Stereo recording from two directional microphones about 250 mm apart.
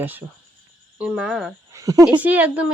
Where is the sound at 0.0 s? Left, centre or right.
Centre.